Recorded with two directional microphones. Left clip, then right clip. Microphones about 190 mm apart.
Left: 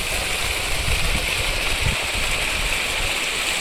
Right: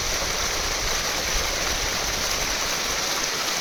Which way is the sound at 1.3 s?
20° right (ahead or behind).